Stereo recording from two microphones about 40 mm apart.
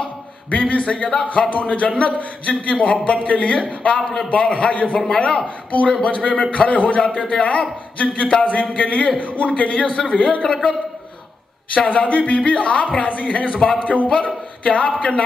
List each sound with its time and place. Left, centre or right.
0.5 s a man's voice: left
5.0 s speech: left
5.7 s a man's voice: left
11.7 s a man's voice: left
13.7 s a man's voice: left
14.0 s a man's voice: left